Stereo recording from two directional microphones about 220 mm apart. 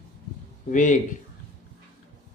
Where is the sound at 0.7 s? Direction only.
35° left (ahead or behind).